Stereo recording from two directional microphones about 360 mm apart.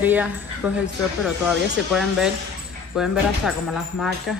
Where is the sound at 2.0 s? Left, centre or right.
Centre.